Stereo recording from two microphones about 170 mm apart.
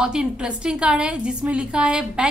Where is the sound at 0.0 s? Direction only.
5° right (ahead or behind).